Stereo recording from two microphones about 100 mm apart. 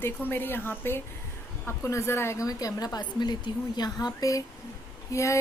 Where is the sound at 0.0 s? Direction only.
20° left (ahead or behind).